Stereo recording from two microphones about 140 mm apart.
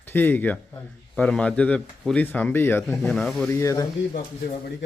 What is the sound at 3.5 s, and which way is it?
Speech, 20° left (ahead or behind).